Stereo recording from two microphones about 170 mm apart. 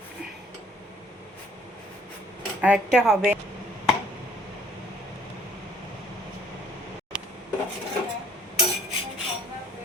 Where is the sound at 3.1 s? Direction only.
5° right (ahead or behind).